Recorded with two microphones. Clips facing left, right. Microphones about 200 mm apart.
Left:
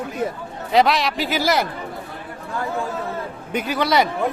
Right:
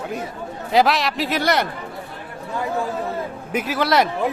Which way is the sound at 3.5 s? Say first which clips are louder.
Even; centre (ahead or behind).